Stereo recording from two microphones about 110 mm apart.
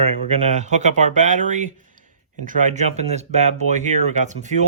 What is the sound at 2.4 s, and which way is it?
Speech, 90° right.